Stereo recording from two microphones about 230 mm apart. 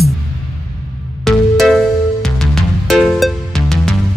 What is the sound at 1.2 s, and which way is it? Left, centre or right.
Music, centre.